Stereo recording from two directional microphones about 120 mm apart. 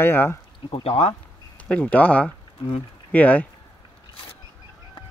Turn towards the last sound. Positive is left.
turn(degrees=15)  # may be behind; listen again after turning